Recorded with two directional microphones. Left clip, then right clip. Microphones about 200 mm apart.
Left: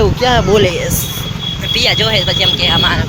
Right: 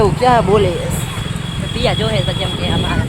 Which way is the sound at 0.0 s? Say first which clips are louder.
Even; 5° right (ahead or behind).